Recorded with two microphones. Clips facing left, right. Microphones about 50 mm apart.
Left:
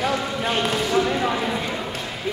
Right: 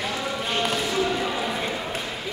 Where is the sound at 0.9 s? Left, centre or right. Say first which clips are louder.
Left 4 dB; left.